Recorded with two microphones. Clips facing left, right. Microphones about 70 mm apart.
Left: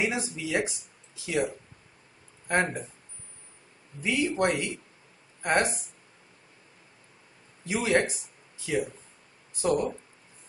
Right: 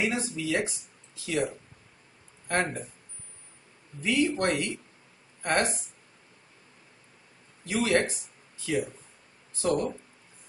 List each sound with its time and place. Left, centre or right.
0.0 s speech: centre
2.4 s speech: centre
4.0 s speech: centre
7.6 s speech: centre